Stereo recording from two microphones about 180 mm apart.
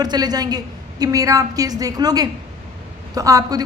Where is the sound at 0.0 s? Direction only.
20° right (ahead or behind).